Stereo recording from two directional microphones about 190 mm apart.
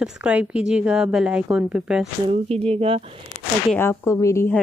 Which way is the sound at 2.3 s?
30° right (ahead or behind).